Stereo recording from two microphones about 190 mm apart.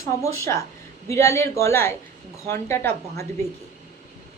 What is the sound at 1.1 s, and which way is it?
Speech, 15° left (ahead or behind).